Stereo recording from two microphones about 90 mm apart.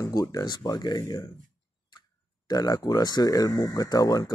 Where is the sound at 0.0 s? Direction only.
40° left (ahead or behind).